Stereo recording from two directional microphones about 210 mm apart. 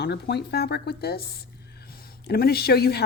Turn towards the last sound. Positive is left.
turn(degrees=50)  # may be behind; listen again after turning